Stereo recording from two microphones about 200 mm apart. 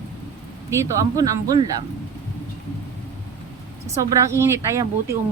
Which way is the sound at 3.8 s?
15° right (ahead or behind).